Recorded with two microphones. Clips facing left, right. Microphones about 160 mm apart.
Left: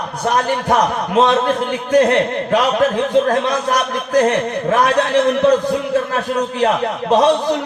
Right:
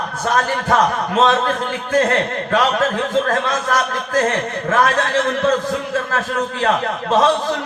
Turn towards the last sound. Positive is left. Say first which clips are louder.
# left 2 dB
turn(degrees=20)  # may be behind; listen again after turning